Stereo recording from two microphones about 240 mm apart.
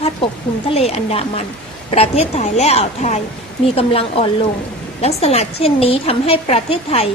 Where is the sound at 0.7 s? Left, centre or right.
Left.